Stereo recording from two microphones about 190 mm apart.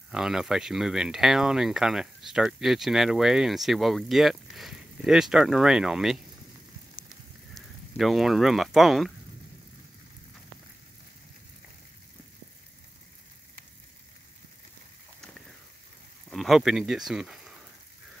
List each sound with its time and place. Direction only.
0.1 s speech: 5° right (ahead or behind)
7.1 s a sound: centre (ahead or behind)
16.3 s speech: centre (ahead or behind)